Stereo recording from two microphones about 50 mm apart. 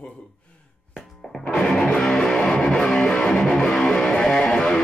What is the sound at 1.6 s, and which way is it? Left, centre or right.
Music, centre.